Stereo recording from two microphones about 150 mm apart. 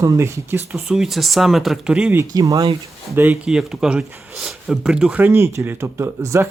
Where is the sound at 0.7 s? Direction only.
Centre (ahead or behind).